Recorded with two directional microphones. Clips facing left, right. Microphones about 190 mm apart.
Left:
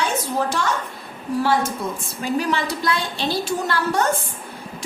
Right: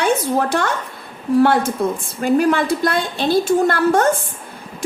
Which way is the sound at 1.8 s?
55° right (ahead or behind).